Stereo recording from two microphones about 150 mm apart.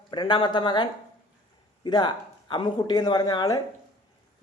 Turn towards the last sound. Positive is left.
turn(degrees=25)  # may be behind; listen again after turning